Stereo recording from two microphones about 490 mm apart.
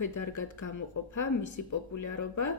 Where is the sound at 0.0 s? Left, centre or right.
Left.